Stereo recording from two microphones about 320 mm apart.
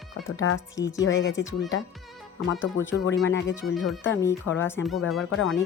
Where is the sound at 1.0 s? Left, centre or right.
Left.